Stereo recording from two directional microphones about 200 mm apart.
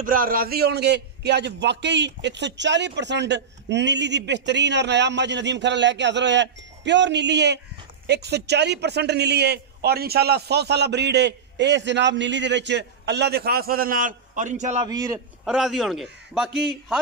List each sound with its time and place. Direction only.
0.0 s a man's voice: 45° right (ahead or behind)
14.8 s a man's voice: 20° right (ahead or behind)
15.4 s a man's voice: centre (ahead or behind)